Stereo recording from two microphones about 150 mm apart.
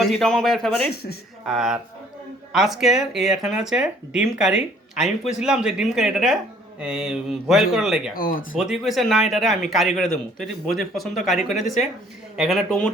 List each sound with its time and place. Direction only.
0.2 s speech: 5° left (ahead or behind)
8.1 s speech: 70° left (ahead or behind)
8.5 s speech: 5° right (ahead or behind)